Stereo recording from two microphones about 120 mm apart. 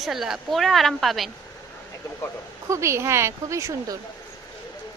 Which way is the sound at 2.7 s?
25° right (ahead or behind).